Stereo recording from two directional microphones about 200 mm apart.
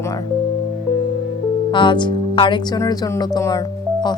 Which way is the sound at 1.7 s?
25° left (ahead or behind).